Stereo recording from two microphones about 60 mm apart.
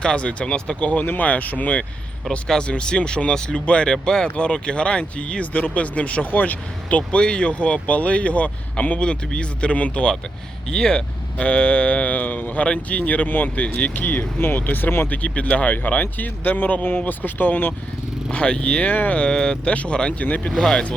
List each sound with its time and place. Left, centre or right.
0.0 s speech: centre; by 15.1 s left
15.1 s speech: left
18.3 s speech: centre
20.6 s speech: centre